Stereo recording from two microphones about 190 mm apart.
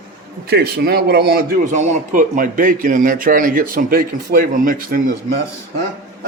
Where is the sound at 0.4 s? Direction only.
60° right (ahead or behind).